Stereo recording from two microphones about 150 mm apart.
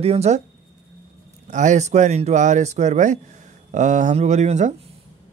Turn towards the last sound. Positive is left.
turn(degrees=-50)  # may be behind; listen again after turning